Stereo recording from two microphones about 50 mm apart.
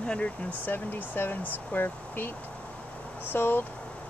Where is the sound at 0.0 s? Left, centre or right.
Left.